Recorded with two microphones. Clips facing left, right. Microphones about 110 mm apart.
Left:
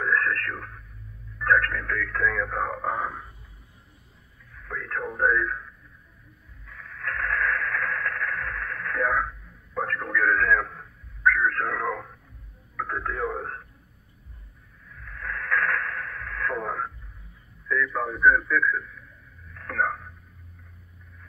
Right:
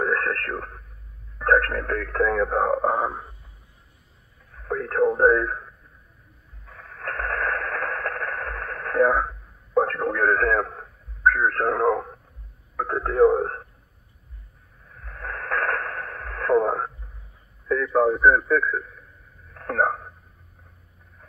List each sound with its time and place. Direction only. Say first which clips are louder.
0.0 s radio: right 2 dB; 40° right (ahead or behind)
1.4 s speech: right 3 dB; 40° right (ahead or behind)
4.5 s speech: right 7 dB; 40° right (ahead or behind)
6.6 s radio: right 1 dB; 40° right (ahead or behind)
12.7 s speech: right 9 dB; 40° right (ahead or behind)
14.9 s radio: right 1 dB; 40° right (ahead or behind)
17.6 s a man's voice: right 7 dB; 40° right (ahead or behind)
19.5 s a sound: right 4 dB; 40° right (ahead or behind)